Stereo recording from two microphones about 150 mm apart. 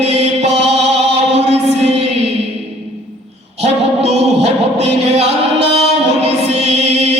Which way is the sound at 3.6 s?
45° right (ahead or behind).